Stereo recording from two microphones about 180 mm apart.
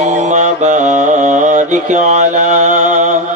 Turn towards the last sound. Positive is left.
turn(degrees=-40)  # may be behind; listen again after turning